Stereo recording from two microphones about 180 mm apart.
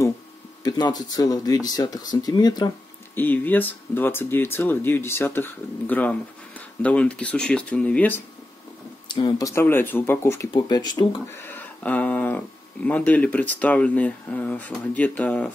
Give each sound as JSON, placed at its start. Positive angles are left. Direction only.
{"t": 0.7, "sound": "speech", "side_deg": 20}
{"t": 3.2, "sound": "speech", "side_deg": 10}
{"t": 9.1, "sound": "speech", "side_deg": 20}
{"t": 11.4, "sound": "speech", "side_deg": 10}